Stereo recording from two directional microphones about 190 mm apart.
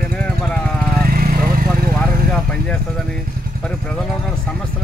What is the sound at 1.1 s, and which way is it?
Vehicle, 50° right (ahead or behind).